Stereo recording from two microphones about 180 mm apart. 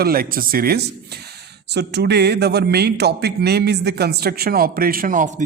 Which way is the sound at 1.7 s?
70° right (ahead or behind).